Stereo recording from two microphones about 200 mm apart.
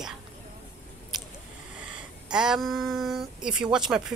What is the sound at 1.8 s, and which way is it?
Speech, 5° right (ahead or behind).